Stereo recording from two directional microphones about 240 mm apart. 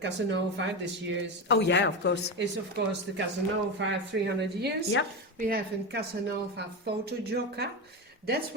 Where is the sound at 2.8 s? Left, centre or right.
Right.